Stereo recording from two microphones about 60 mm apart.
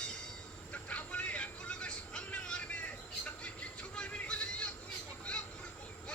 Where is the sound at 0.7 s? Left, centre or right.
Left.